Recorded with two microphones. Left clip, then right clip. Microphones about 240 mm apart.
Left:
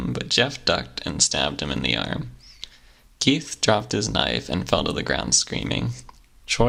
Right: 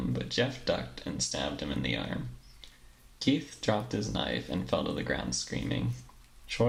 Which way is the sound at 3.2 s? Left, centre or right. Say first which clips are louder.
Left 9 dB; left.